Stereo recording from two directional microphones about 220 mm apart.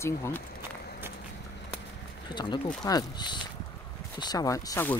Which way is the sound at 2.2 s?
20° left (ahead or behind).